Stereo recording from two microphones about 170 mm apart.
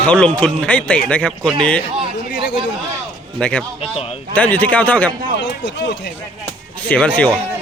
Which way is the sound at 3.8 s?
35° left (ahead or behind).